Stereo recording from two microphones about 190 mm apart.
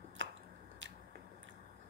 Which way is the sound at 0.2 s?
75° right (ahead or behind).